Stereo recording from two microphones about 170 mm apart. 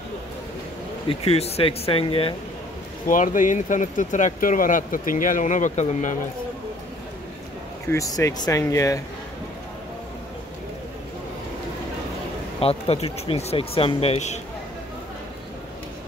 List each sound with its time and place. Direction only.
1.0 s speech: 35° left (ahead or behind)
3.1 s speech: 50° left (ahead or behind)
7.9 s speech: 20° left (ahead or behind)
12.5 s speech: 35° left (ahead or behind)